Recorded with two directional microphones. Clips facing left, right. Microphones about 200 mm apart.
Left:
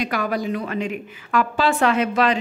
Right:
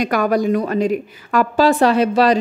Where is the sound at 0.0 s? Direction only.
45° right (ahead or behind).